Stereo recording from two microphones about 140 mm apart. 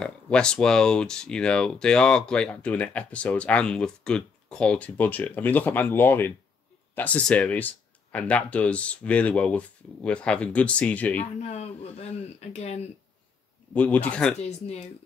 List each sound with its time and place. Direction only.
0.0 s speech: 5° left (ahead or behind)
11.4 s speech: 50° left (ahead or behind)
13.7 s speech: 10° left (ahead or behind)